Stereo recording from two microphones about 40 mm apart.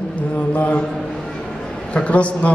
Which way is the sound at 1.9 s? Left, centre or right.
Left.